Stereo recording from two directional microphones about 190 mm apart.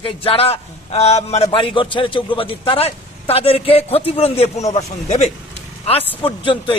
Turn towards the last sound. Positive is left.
turn(degrees=25)  # may be behind; listen again after turning